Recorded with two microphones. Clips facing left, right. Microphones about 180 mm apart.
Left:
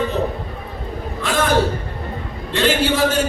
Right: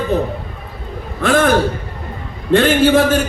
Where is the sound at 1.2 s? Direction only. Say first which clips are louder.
Right 9 dB; 55° right (ahead or behind).